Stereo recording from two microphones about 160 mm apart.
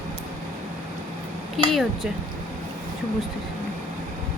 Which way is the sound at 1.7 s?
Centre (ahead or behind).